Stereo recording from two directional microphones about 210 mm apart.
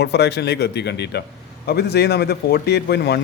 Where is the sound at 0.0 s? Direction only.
55° left (ahead or behind).